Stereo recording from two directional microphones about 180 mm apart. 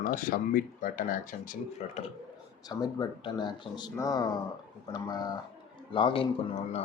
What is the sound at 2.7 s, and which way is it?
Speech, 20° left (ahead or behind).